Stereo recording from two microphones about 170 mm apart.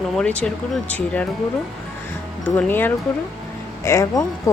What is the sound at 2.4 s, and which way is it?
Speech, 10° left (ahead or behind).